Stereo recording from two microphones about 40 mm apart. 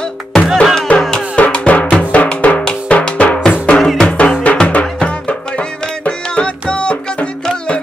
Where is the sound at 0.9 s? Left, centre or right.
Left.